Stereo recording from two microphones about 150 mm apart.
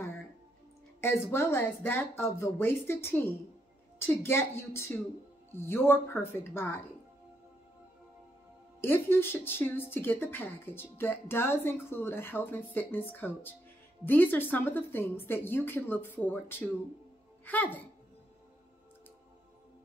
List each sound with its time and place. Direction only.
1.0 s speech: 15° left (ahead or behind)
8.8 s speech: 15° left (ahead or behind)